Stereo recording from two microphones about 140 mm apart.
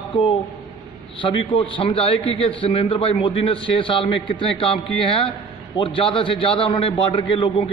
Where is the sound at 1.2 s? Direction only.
40° left (ahead or behind).